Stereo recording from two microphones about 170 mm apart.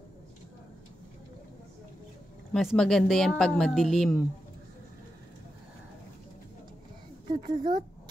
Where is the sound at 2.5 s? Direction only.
Centre (ahead or behind).